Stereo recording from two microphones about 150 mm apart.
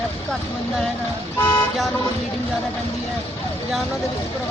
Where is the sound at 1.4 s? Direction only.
20° left (ahead or behind).